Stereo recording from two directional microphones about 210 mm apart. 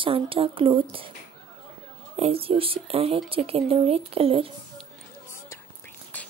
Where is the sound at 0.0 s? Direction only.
25° right (ahead or behind).